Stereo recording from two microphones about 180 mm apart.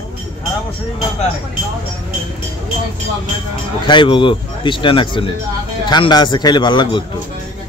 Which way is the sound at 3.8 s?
25° left (ahead or behind).